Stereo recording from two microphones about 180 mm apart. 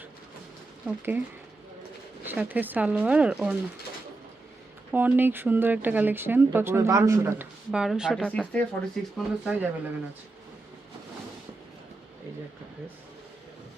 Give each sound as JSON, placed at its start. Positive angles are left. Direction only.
{"t": 0.9, "sound": "speech", "side_deg": -10}
{"t": 2.2, "sound": "speech", "side_deg": -10}
{"t": 4.9, "sound": "speech", "side_deg": -10}
{"t": 7.7, "sound": "speech", "side_deg": -5}
{"t": 9.1, "sound": "speech", "side_deg": -5}